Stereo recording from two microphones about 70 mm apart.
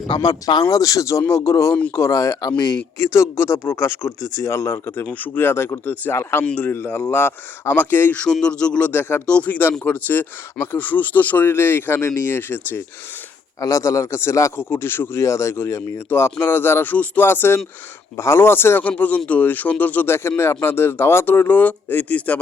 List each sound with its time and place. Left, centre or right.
0.2 s a man's voice: left
3.0 s speech: left
5.1 s speech: left
8.1 s speech: centre
8.9 s speech: left
9.2 s speech: centre
9.8 s speech: left
13.6 s a man's voice: left
14.5 s speech: left
18.9 s speech: left
20.1 s speech: left